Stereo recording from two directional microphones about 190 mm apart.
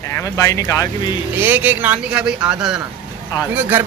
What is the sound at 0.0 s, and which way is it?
Speech, 15° left (ahead or behind).